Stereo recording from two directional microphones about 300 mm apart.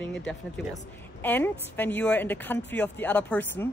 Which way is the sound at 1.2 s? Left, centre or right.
Centre.